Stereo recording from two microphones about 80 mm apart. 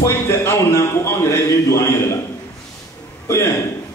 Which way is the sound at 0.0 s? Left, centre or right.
Left.